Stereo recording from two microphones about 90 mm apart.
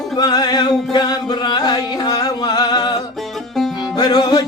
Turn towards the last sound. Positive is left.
turn(degrees=50)  # may be behind; listen again after turning